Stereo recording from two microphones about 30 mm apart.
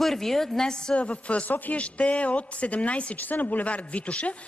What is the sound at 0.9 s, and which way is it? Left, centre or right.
A woman's voice, left.